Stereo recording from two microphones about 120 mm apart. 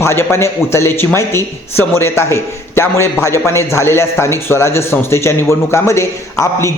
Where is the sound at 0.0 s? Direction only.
20° left (ahead or behind).